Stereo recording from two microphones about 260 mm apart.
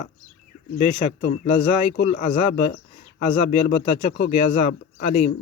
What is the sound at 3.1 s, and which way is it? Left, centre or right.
Speech, left.